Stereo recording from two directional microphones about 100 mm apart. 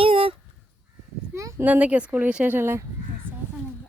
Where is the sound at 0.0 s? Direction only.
65° right (ahead or behind).